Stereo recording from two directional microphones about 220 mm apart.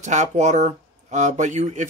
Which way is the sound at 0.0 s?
30° right (ahead or behind).